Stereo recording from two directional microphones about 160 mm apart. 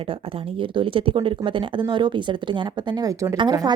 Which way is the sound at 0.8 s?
35° right (ahead or behind).